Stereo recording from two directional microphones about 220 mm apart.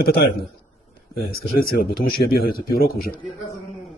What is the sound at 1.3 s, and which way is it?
A man's voice, 40° left (ahead or behind).